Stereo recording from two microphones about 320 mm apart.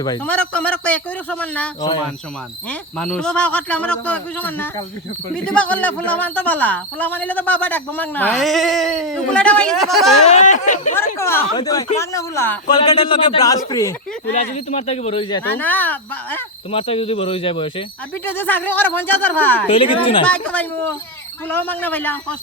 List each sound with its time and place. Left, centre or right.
0.0 s speech: centre
10.2 s speech: left
10.9 s speech: centre
14.3 s speech: left; by 16.4 s centre
16.7 s speech: centre
18.3 s speech: centre
19.6 s speech: centre
20.2 s speech: centre